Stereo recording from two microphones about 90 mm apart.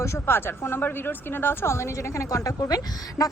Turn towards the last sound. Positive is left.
turn(degrees=45)  # may be behind; listen again after turning